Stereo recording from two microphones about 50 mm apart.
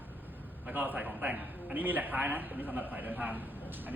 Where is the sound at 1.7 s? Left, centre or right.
Right.